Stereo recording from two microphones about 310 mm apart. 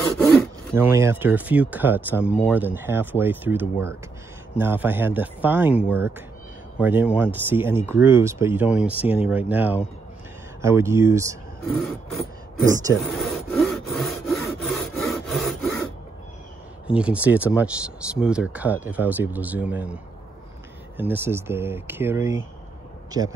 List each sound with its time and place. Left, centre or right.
0.0 s wood: centre
0.7 s speech: centre
13.0 s rub: centre
16.8 s speech: centre
21.0 s speech: centre